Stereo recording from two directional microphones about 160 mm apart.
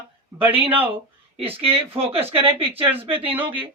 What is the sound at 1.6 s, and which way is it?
Speech, 35° right (ahead or behind).